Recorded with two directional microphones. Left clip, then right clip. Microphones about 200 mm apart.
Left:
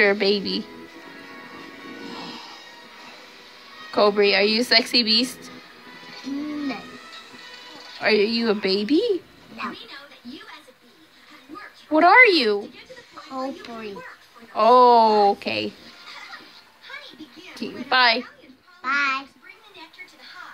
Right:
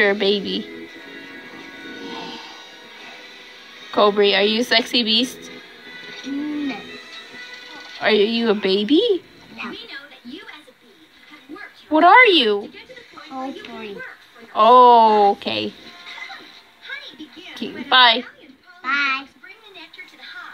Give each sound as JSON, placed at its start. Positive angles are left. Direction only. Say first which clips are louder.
{"t": 0.0, "sound": "a woman's voice", "louder": "right 1 dB", "side_deg": 10}
{"t": 3.9, "sound": "a woman's voice", "louder": "right 2 dB", "side_deg": 5}
{"t": 7.7, "sound": "speech", "louder": "right 3 dB", "side_deg": 5}
{"t": 9.6, "sound": "speech", "louder": "even", "side_deg": 20}
{"t": 11.9, "sound": "a woman's voice", "louder": "right 3 dB", "side_deg": 5}
{"t": 13.3, "sound": "speech", "louder": "even", "side_deg": 25}
{"t": 14.5, "sound": "a woman's voice", "louder": "right 4 dB", "side_deg": 5}
{"t": 17.6, "sound": "a woman's voice", "louder": "right 5 dB", "side_deg": 5}
{"t": 18.8, "sound": "child singing", "louder": "right 2 dB", "side_deg": 15}